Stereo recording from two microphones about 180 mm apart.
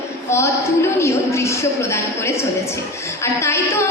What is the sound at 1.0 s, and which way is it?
A woman's voice, 15° left (ahead or behind).